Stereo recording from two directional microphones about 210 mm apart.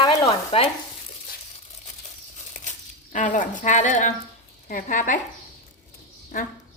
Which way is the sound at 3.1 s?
35° left (ahead or behind).